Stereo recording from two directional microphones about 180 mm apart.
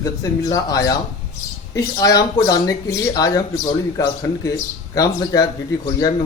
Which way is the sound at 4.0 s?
20° left (ahead or behind).